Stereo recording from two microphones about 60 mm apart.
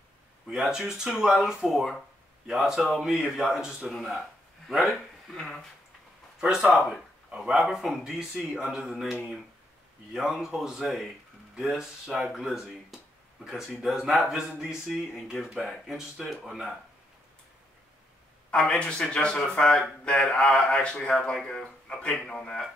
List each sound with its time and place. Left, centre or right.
0.5 s speech: centre
6.4 s a man's voice: centre
18.5 s speech: centre